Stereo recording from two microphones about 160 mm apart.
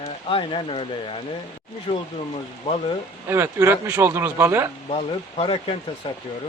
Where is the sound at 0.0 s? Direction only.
35° left (ahead or behind).